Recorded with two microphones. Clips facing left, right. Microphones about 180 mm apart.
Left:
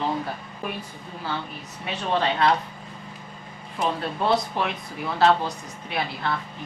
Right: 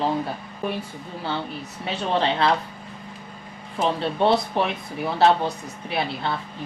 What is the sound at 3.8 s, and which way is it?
Speech, 25° right (ahead or behind).